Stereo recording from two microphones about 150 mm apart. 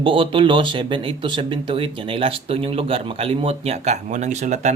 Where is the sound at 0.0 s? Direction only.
35° right (ahead or behind).